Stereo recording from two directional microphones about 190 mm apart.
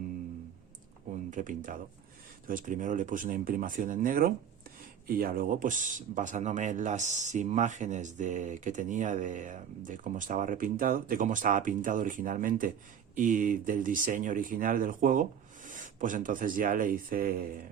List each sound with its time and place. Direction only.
1.1 s speech: 40° right (ahead or behind)